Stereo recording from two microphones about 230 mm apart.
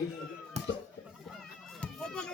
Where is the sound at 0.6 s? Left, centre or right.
Right.